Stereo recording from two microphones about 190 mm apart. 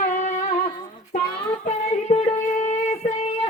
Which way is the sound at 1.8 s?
30° left (ahead or behind).